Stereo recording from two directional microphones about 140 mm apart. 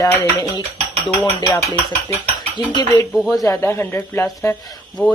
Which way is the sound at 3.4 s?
20° left (ahead or behind).